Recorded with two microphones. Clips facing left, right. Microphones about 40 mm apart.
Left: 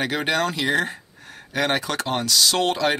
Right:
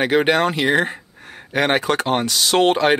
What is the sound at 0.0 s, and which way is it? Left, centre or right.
Speech, right.